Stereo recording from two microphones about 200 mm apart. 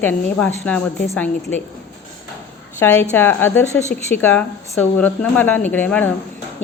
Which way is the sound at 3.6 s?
35° left (ahead or behind).